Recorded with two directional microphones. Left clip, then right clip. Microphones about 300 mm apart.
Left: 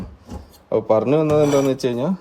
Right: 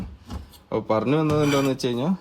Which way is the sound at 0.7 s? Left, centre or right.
Centre.